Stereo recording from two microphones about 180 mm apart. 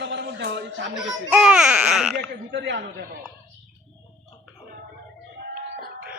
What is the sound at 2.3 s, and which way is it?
Speech, 80° right.